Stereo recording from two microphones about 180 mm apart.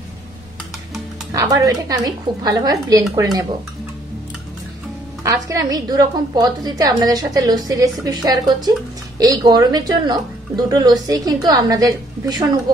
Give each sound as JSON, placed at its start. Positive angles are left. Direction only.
{"t": 1.3, "sound": "speech", "side_deg": -20}
{"t": 5.2, "sound": "speech", "side_deg": -20}